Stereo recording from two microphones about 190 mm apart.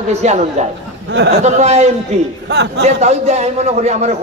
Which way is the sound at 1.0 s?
65° right (ahead or behind).